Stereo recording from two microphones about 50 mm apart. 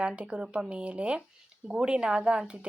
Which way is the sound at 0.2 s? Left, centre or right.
Centre.